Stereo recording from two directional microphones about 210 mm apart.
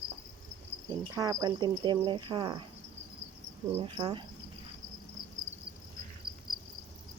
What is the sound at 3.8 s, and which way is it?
Cricket, 20° right (ahead or behind).